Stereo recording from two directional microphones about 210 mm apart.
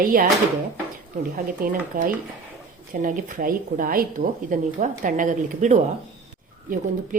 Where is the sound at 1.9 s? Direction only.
40° right (ahead or behind).